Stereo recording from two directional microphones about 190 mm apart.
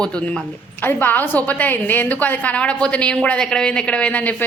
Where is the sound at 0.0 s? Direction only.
5° left (ahead or behind).